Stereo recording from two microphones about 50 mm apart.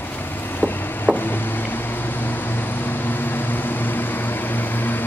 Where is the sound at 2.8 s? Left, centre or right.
Left.